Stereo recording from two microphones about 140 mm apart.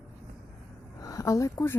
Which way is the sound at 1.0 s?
25° left (ahead or behind).